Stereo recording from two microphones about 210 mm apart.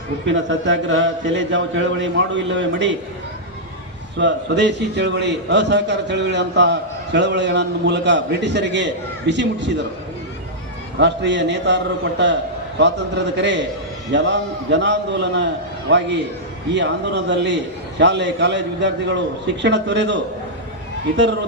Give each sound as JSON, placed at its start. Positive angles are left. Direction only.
{"t": 0.3, "sound": "a man's voice", "side_deg": -60}
{"t": 4.2, "sound": "a man's voice", "side_deg": -55}
{"t": 11.0, "sound": "a man's voice", "side_deg": -55}
{"t": 12.8, "sound": "a man's voice", "side_deg": -55}